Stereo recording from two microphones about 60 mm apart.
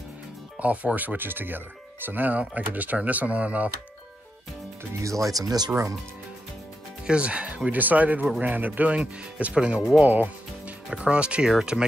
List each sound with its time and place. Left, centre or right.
0.6 s speech: right
5.0 s speech: right
7.1 s speech: centre
10.0 s speech: right
10.9 s speech: centre